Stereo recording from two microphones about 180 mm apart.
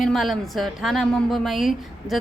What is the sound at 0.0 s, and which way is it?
A woman's voice, centre (ahead or behind).